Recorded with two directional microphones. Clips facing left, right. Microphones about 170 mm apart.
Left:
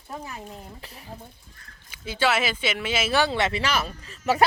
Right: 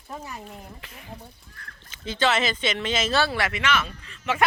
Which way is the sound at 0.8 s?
35° left (ahead or behind).